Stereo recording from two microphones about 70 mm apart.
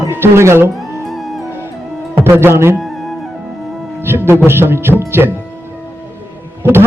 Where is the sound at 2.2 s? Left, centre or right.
Right.